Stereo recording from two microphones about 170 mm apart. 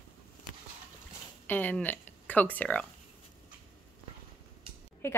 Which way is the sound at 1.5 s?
10° left (ahead or behind).